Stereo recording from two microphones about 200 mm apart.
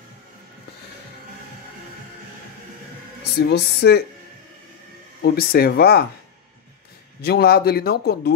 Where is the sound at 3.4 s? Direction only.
55° left (ahead or behind).